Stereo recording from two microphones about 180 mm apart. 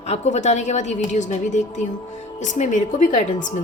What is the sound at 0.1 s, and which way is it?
A woman's voice, 40° left (ahead or behind).